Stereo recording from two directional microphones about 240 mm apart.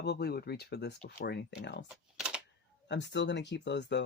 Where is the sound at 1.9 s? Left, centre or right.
Centre.